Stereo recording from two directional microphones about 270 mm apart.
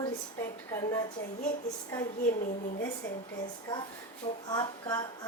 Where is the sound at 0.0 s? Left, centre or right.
Centre.